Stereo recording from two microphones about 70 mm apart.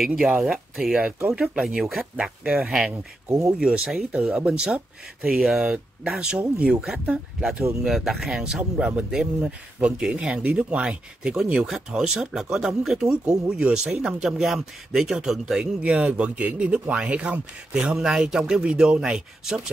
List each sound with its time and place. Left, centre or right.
0.0 s speech: centre
0.9 s speech: centre
1.6 s speech: centre